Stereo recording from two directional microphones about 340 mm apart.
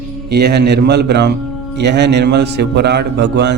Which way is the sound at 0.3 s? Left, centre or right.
Right.